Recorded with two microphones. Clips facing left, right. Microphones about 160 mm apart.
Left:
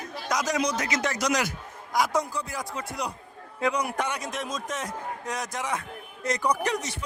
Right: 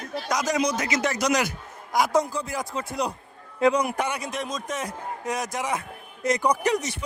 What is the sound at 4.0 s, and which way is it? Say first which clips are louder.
A man's voice: right 2 dB; 5° right (ahead or behind).